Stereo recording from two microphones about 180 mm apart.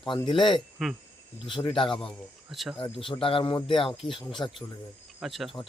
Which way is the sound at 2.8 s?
30° left (ahead or behind).